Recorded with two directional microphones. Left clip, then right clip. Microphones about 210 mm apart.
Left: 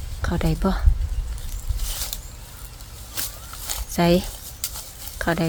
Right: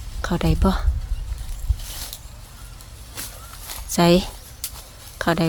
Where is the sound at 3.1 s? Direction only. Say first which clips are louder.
Left 3 dB; 35° left (ahead or behind).